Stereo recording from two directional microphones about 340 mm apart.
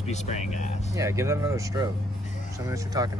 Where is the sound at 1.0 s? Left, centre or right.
Centre.